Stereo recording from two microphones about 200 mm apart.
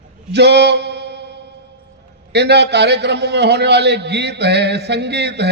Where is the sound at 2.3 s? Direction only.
55° right (ahead or behind).